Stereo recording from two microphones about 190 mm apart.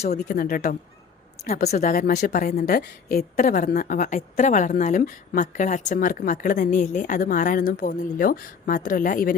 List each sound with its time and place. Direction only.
0.1 s a woman's voice: 50° left (ahead or behind)